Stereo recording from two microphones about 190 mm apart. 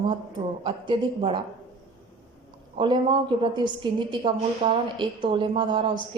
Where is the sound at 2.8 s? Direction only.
25° right (ahead or behind).